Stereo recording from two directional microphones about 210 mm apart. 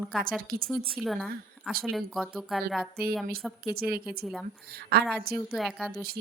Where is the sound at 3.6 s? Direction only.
45° right (ahead or behind).